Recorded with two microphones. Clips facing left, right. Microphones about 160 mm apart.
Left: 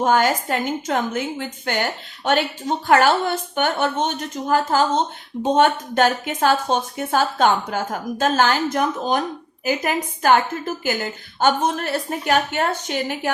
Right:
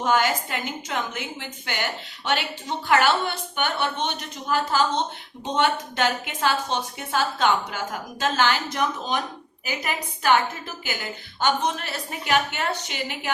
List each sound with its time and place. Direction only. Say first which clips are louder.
0.0 s a woman's voice: left 4 dB; 45° left (ahead or behind)